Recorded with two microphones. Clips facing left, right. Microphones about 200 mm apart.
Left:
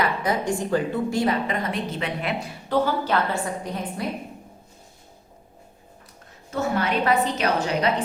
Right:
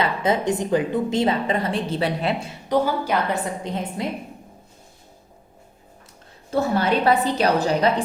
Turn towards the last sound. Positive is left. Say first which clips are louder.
# right 3 dB
turn(degrees=-35)  # may be behind; listen again after turning